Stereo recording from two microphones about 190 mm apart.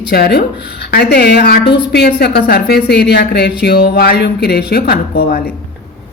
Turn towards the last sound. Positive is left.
turn(degrees=55)  # may be behind; listen again after turning